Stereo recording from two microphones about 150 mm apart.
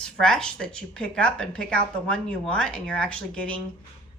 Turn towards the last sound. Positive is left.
turn(degrees=10)  # may be behind; listen again after turning